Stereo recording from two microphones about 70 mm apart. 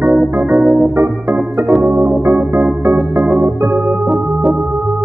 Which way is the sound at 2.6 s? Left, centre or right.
Centre.